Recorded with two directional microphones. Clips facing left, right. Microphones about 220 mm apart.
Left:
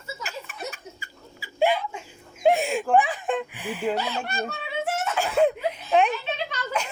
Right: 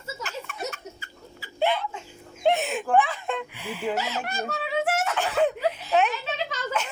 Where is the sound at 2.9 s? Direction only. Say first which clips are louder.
Left 1 dB; 15° left (ahead or behind).